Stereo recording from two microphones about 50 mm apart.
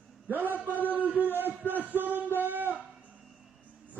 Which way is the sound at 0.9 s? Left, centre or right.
Right.